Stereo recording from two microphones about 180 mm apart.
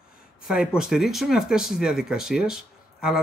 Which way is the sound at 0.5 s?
5° right (ahead or behind).